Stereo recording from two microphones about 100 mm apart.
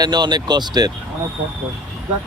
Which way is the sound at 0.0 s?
45° right (ahead or behind).